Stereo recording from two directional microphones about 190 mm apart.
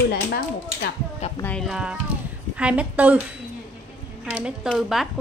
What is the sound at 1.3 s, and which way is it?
A woman's voice, 5° left (ahead or behind).